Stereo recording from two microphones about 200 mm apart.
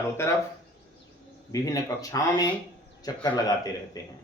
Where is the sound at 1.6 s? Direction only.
15° left (ahead or behind).